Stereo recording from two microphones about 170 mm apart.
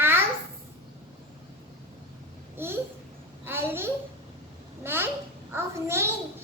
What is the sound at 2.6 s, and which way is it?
Babbling, 15° right (ahead or behind).